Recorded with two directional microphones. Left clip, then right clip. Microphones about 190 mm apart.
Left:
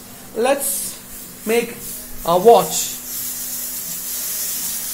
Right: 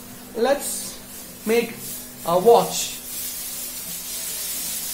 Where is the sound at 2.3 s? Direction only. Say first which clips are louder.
Left 4 dB; 20° left (ahead or behind).